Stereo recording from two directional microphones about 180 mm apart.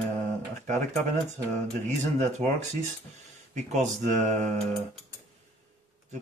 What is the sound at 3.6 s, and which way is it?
Speech, 40° right (ahead or behind).